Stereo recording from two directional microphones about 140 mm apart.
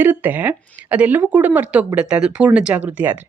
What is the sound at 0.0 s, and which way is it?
Speech, 15° right (ahead or behind).